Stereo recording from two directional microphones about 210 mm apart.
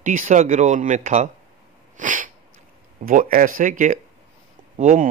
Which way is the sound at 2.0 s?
40° right (ahead or behind).